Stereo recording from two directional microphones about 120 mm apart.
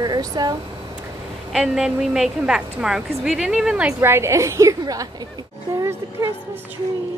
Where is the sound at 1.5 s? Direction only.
Centre (ahead or behind).